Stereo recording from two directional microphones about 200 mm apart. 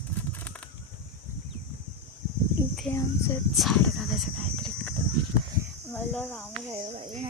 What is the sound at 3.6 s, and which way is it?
Speech, centre (ahead or behind).